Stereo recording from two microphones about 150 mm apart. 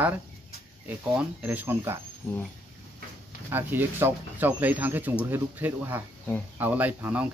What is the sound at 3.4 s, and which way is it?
Speech, 15° right (ahead or behind).